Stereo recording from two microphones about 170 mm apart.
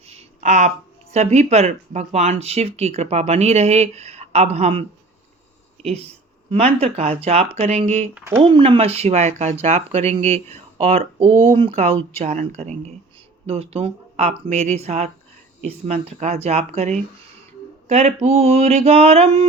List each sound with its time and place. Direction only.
0.0 s a sound: 40° right (ahead or behind)
1.1 s speech: 40° right (ahead or behind)
8.1 s speech: 10° right (ahead or behind)
8.4 s speech: 30° right (ahead or behind)